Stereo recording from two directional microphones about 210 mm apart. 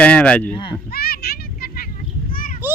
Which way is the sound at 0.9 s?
45° left (ahead or behind).